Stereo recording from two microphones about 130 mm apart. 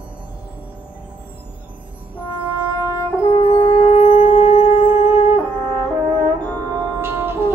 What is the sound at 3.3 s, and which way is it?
Brass instrument, 45° left (ahead or behind).